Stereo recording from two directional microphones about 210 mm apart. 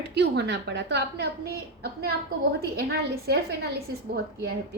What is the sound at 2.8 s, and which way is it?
Speech, 50° right (ahead or behind).